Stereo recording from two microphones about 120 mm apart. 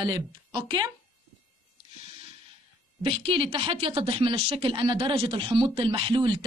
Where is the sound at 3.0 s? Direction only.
50° right (ahead or behind).